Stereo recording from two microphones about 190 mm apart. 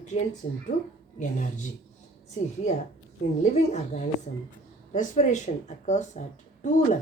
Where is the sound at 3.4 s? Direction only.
40° left (ahead or behind).